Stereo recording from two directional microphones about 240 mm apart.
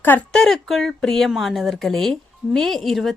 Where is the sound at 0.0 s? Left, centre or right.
Centre.